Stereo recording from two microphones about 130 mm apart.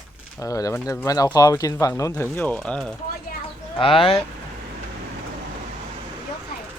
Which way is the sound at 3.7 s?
40° left (ahead or behind).